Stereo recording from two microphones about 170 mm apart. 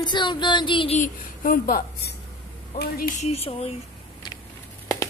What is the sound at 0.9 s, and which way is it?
A woman's voice, 50° left (ahead or behind).